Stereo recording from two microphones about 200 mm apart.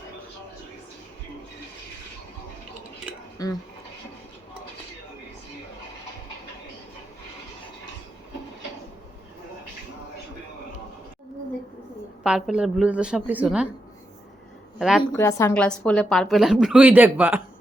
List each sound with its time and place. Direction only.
3.4 s speech: 20° left (ahead or behind)
12.2 s a woman's voice: 5° right (ahead or behind)
14.8 s a woman's voice: centre (ahead or behind)
15.1 s a woman's voice: 15° left (ahead or behind); by 17.4 s 10° right (ahead or behind)